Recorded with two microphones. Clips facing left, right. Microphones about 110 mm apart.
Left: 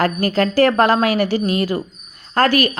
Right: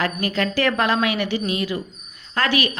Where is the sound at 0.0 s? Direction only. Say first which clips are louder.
Left 6 dB; 40° left (ahead or behind).